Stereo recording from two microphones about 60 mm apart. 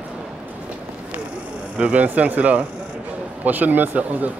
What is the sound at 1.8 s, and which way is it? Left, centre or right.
Speech, right.